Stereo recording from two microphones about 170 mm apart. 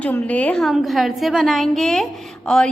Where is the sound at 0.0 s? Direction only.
10° left (ahead or behind).